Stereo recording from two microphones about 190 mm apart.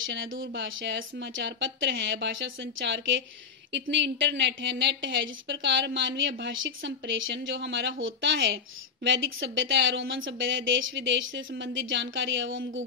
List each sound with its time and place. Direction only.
0.0 s speech: 85° right